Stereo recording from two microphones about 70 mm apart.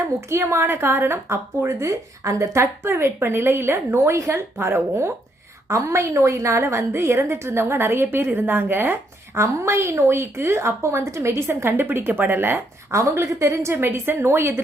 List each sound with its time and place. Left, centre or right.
0.3 s a woman's voice: right
12.9 s a woman's voice: right